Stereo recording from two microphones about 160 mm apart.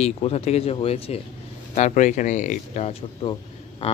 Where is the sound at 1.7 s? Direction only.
50° left (ahead or behind).